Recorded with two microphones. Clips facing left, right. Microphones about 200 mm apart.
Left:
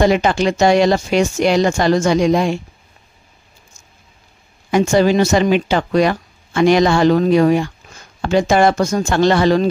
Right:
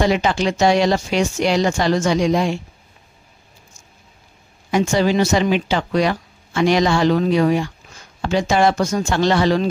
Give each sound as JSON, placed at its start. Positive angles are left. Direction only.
{"t": 0.0, "sound": "speech", "side_deg": 50}
{"t": 4.6, "sound": "speech", "side_deg": 50}